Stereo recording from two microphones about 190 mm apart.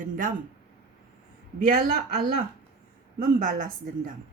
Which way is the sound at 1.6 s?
50° right (ahead or behind).